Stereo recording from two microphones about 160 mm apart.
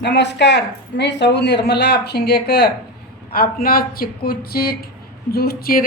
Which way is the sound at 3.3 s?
70° left (ahead or behind).